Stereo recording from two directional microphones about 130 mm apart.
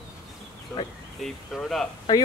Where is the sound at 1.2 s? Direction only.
Centre (ahead or behind).